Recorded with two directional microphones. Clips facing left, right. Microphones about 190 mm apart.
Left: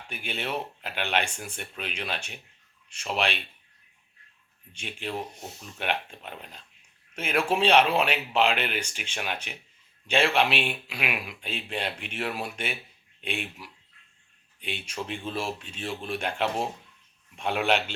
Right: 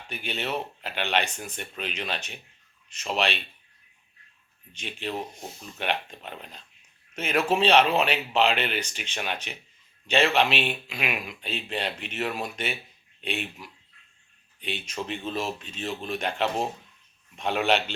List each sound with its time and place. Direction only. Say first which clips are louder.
0.1 s speech: right 1 dB; 10° left (ahead or behind)
4.7 s speech: right 1 dB; 10° left (ahead or behind)